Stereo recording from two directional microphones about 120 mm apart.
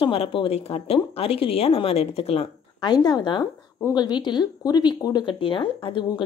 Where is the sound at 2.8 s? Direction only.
35° left (ahead or behind).